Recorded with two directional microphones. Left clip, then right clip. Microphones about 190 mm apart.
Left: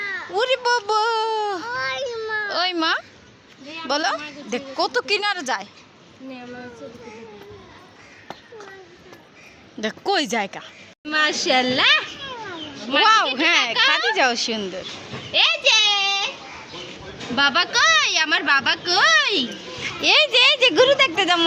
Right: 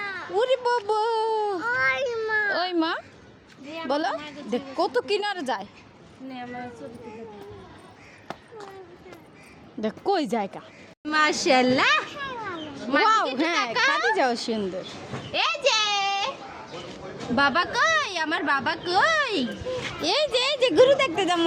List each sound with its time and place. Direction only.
0.0 s a sound: 60° right (ahead or behind)
0.3 s speech: 10° right (ahead or behind)
1.6 s a sound: 35° right (ahead or behind)
2.5 s a child's voice: 20° right (ahead or behind)
10.1 s a woman's voice: 10° right (ahead or behind)
11.0 s speech: 40° right (ahead or behind)
12.9 s a woman's voice: 15° right (ahead or behind)
15.3 s a sound: 30° right (ahead or behind)
17.3 s speech: 40° right (ahead or behind)
19.8 s speech: centre (ahead or behind)